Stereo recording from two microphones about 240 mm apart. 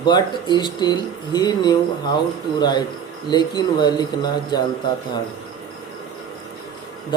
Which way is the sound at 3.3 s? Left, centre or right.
Centre.